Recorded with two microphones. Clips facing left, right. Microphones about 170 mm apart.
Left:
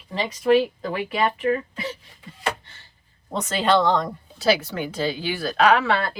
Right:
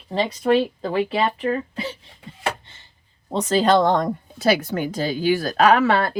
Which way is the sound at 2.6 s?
20° right (ahead or behind).